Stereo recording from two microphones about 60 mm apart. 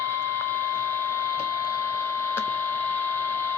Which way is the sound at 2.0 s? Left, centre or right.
Left.